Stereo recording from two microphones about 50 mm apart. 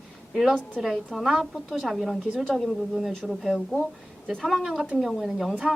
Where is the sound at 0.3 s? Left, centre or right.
Centre.